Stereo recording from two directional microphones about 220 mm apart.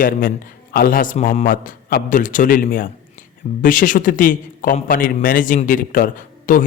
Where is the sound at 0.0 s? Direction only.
40° left (ahead or behind).